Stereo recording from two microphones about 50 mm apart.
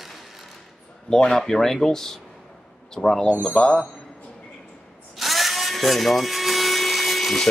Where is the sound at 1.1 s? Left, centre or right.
Centre.